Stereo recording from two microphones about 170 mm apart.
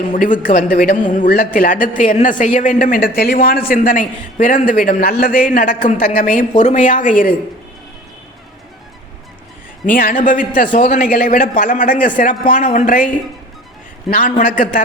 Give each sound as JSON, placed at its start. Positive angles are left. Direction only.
{"t": 0.0, "sound": "a man's voice", "side_deg": 50}
{"t": 9.8, "sound": "a man's voice", "side_deg": 55}